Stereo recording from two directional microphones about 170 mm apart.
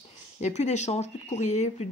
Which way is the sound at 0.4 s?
40° left (ahead or behind).